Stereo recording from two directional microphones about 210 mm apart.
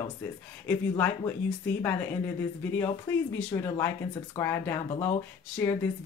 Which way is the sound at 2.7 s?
10° left (ahead or behind).